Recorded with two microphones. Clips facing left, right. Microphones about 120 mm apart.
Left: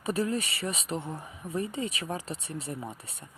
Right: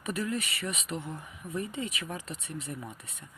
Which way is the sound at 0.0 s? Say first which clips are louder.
Left 4 dB; 30° left (ahead or behind).